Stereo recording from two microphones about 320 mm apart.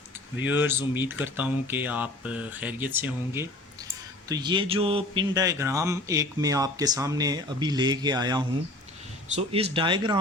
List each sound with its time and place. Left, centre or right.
0.5 s speech: centre